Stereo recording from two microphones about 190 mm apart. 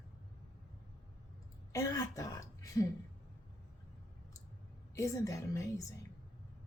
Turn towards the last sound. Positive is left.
turn(degrees=15)  # may be behind; listen again after turning